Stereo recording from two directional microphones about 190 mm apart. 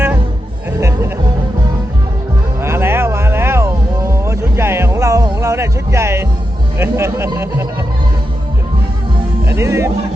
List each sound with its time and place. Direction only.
0.8 s music: 15° right (ahead or behind)
2.6 s music: 10° right (ahead or behind)
9.5 s music: 15° right (ahead or behind)